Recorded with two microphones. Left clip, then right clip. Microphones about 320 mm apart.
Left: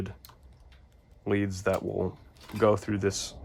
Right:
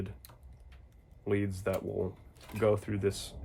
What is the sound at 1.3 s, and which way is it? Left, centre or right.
Speech, left.